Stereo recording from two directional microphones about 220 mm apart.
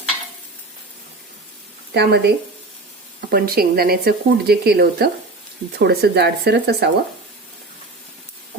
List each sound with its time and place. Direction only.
1.9 s speech: 50° right (ahead or behind)